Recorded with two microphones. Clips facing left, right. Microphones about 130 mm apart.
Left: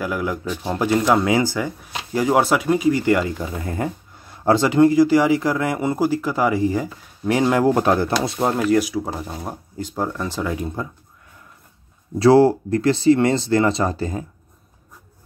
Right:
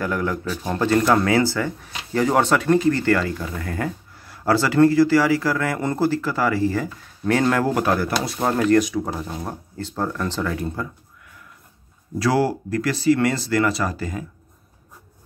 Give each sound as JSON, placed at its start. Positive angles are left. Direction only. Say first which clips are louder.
{"t": 0.0, "sound": "speech", "louder": "even", "side_deg": 10}
{"t": 8.4, "sound": "speech", "louder": "right 2 dB", "side_deg": 10}
{"t": 12.2, "sound": "speech", "louder": "left 7 dB", "side_deg": 25}